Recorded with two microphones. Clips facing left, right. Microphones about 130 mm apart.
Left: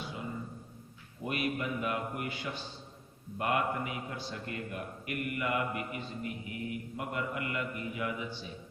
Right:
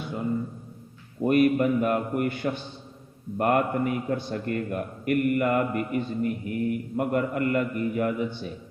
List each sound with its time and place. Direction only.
1.2 s a man's voice: 50° right (ahead or behind)